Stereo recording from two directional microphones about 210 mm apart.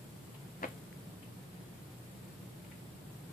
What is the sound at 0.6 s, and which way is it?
Tick-tock, 40° left (ahead or behind).